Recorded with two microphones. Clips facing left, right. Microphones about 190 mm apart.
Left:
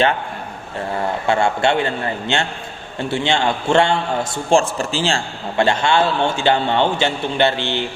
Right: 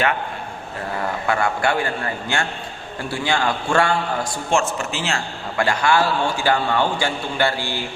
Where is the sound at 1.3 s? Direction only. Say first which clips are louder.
Left 4 dB; 25° left (ahead or behind).